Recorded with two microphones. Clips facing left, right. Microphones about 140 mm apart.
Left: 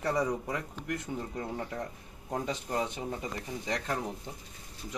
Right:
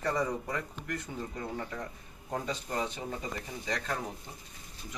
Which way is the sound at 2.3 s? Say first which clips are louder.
Left 2 dB; 20° left (ahead or behind).